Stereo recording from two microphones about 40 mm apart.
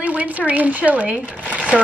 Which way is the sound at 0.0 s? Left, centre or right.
Right.